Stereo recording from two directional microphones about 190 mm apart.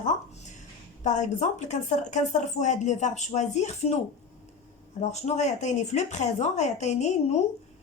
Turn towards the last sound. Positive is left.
turn(degrees=35)  # may be behind; listen again after turning